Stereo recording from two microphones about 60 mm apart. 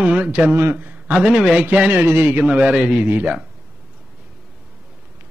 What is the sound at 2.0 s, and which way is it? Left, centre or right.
Speech, right.